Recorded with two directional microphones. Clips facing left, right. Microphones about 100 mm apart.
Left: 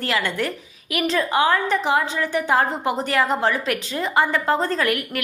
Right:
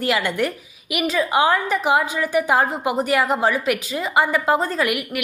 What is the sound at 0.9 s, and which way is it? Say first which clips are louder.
Speech: right 1 dB; 5° right (ahead or behind).